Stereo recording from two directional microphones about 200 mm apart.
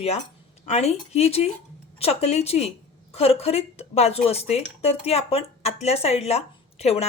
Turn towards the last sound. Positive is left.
turn(degrees=30)  # may be behind; listen again after turning